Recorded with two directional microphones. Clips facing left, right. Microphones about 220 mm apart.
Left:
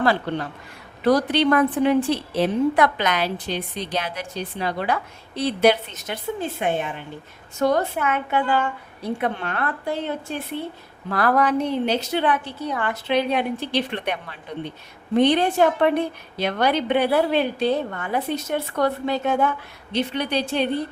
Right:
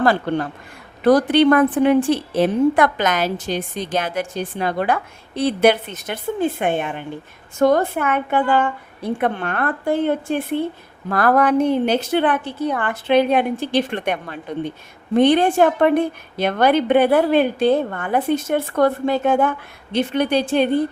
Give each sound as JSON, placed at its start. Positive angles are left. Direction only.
{"t": 0.0, "sound": "a woman's voice", "side_deg": -50}